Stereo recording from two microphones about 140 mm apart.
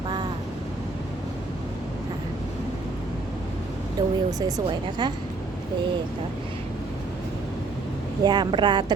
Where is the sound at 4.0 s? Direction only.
30° right (ahead or behind).